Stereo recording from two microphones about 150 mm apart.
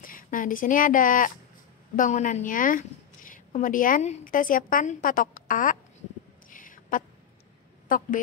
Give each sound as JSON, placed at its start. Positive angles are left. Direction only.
{"t": 0.0, "sound": "a woman's voice", "side_deg": 65}
{"t": 6.5, "sound": "a sound", "side_deg": 65}
{"t": 7.9, "sound": "a woman's voice", "side_deg": 65}